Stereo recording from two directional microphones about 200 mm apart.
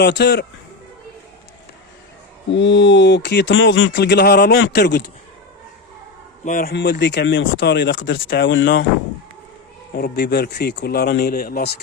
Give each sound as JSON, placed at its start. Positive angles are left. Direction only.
{"t": 0.0, "sound": "speech", "side_deg": 60}
{"t": 2.6, "sound": "speech", "side_deg": 65}
{"t": 6.4, "sound": "speech", "side_deg": 45}
{"t": 6.7, "sound": "speech", "side_deg": 60}
{"t": 9.9, "sound": "speech", "side_deg": 50}